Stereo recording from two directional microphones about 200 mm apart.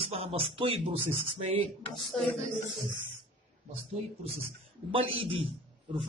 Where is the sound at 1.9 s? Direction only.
Centre (ahead or behind).